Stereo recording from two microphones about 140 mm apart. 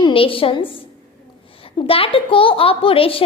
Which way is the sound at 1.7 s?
40° left (ahead or behind).